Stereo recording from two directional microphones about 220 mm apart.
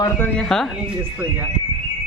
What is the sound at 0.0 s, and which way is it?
Speech, 5° left (ahead or behind).